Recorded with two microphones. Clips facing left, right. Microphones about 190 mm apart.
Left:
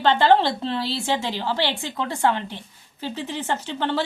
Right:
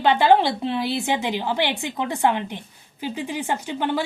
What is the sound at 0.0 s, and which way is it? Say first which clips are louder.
A woman's voice: right 1 dB; 10° right (ahead or behind).